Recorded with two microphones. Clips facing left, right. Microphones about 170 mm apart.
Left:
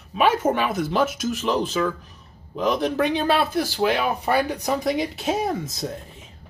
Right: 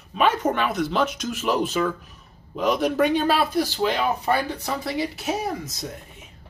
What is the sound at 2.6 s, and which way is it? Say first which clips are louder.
Speech: right 1 dB; centre (ahead or behind).